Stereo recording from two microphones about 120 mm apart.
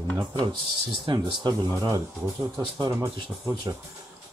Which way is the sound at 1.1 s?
35° right (ahead or behind).